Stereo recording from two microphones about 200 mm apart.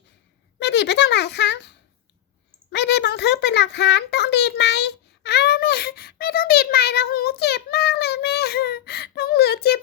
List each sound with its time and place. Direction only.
0.6 s a child's voice: 60° left (ahead or behind)
2.7 s a child's voice: 60° left (ahead or behind)